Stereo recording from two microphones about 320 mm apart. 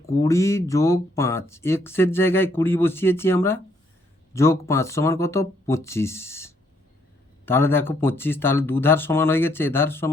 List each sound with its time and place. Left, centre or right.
0.0 s speech: centre